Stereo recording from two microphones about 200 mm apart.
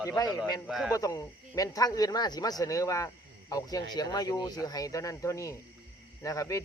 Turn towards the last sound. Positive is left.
turn(degrees=15)  # may be behind; listen again after turning